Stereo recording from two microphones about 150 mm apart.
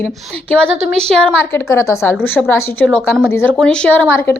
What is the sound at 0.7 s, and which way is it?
Speech, 50° right (ahead or behind).